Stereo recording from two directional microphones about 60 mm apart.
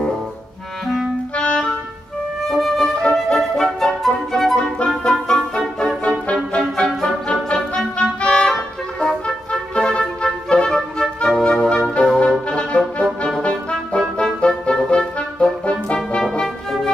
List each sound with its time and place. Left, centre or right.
1.3 s clarinet: centre
2.5 s music: centre
12.4 s brass instrument: centre
13.4 s music: centre